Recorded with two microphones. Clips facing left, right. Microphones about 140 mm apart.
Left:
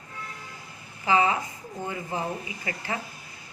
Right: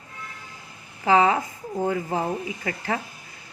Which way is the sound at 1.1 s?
55° right (ahead or behind).